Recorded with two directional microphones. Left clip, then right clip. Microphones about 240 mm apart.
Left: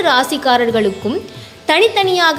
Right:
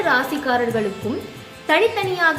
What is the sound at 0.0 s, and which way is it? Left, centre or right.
A woman's voice, left.